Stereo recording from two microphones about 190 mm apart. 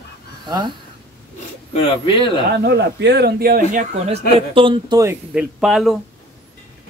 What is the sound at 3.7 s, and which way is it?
Speech, 40° right (ahead or behind).